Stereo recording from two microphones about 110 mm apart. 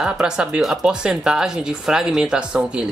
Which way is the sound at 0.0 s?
5° right (ahead or behind).